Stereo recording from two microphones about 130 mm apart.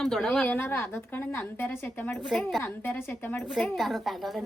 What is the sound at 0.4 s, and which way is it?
Speech, 15° left (ahead or behind).